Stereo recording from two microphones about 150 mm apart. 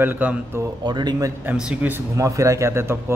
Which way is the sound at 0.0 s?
10° right (ahead or behind).